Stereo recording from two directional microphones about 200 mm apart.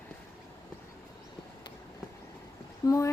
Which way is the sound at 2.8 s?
15° left (ahead or behind).